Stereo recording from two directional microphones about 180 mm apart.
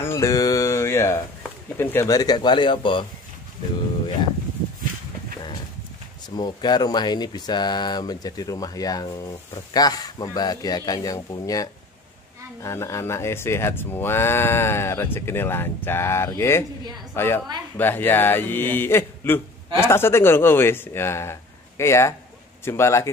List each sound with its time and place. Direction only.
0.0 s a sound: 15° left (ahead or behind)
1.8 s speech: 15° left (ahead or behind)
6.3 s a woman's voice: 25° left (ahead or behind)